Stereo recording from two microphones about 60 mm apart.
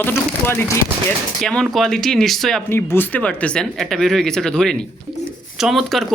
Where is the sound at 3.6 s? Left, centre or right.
Centre.